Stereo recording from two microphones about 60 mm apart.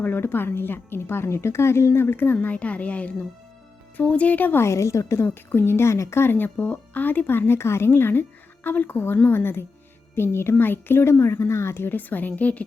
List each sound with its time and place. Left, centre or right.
0.0 s speech: left
4.6 s a child's voice: left